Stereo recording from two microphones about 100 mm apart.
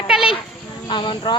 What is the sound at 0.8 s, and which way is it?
Speech, 55° left (ahead or behind).